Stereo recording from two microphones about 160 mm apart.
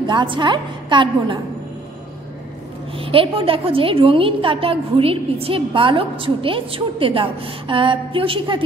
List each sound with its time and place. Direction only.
0.0 s a woman's voice: 30° right (ahead or behind)
3.0 s a woman's voice: 35° right (ahead or behind)